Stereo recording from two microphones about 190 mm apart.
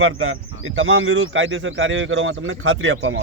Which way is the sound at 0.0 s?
90° right.